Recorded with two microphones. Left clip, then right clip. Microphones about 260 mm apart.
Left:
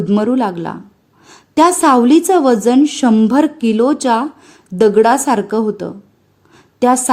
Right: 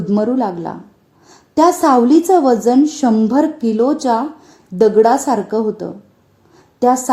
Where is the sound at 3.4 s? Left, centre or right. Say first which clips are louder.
Left 1 dB; left.